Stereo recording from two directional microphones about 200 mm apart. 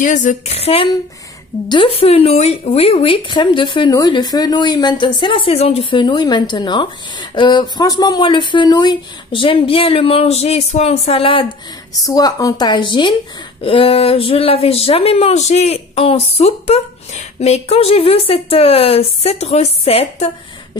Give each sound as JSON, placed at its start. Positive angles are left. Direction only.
{"t": 0.0, "sound": "speech", "side_deg": 40}
{"t": 12.0, "sound": "speech", "side_deg": 15}